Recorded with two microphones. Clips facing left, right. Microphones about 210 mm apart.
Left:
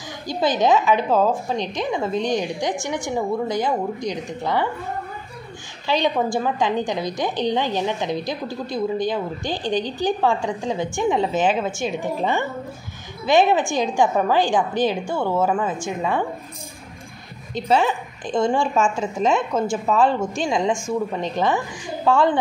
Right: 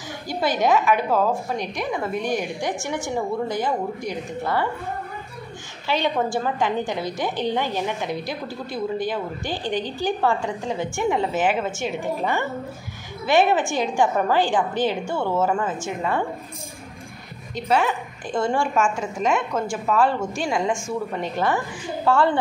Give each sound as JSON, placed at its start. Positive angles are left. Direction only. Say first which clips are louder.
{"t": 0.3, "sound": "a woman's voice", "louder": "left 2 dB", "side_deg": 20}
{"t": 5.9, "sound": "a woman's voice", "louder": "left 2 dB", "side_deg": 15}
{"t": 17.6, "sound": "a woman's voice", "louder": "left 2 dB", "side_deg": 25}